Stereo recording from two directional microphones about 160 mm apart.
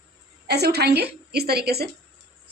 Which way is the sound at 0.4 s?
90° right.